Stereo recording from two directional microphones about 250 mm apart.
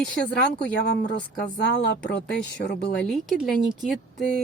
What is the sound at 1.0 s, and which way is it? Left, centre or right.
A woman's voice, left.